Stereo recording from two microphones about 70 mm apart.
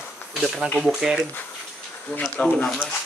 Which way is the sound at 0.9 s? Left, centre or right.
Centre.